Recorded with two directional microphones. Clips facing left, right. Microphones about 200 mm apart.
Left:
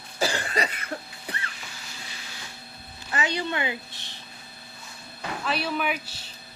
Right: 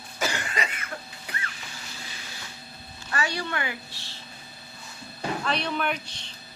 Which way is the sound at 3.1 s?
20° left (ahead or behind).